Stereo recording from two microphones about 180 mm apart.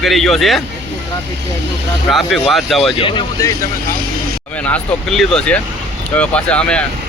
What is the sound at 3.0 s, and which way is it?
Speech, 25° left (ahead or behind).